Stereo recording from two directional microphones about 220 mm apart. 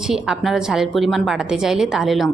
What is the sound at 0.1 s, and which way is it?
A woman's voice, centre (ahead or behind).